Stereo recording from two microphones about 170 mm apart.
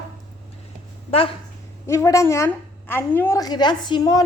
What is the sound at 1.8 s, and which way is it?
A woman's voice, 15° left (ahead or behind).